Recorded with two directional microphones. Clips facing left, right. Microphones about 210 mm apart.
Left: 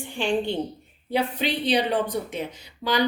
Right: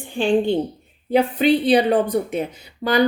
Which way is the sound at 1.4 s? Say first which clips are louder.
Right 10 dB; 55° right (ahead or behind).